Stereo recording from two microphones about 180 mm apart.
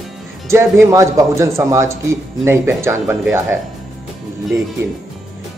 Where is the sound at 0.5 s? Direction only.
15° right (ahead or behind).